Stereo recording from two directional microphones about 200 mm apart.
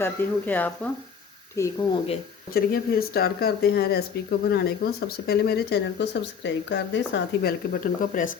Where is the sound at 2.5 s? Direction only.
50° left (ahead or behind).